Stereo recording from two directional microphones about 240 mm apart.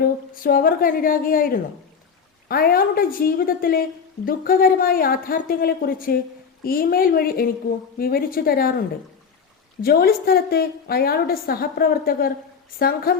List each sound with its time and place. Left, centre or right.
0.0 s a woman's voice: left
9.8 s a woman's voice: left